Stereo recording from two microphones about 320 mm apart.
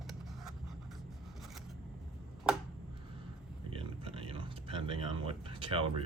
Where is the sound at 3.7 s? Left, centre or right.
Centre.